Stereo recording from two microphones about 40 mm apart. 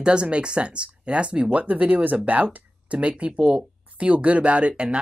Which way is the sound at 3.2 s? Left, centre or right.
Right.